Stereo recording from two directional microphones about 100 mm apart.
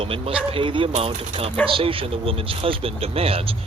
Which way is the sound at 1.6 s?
60° right (ahead or behind).